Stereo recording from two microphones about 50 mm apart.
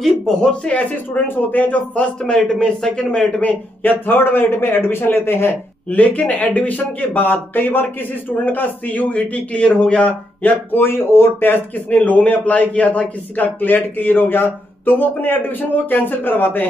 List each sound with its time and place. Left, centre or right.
0.0 s a man's voice: centre
0.7 s speech: left
2.0 s a man's voice: centre
3.3 s speech: left
4.0 s speech: left
5.9 s speech: left
7.0 s speech: left
10.4 s speech: left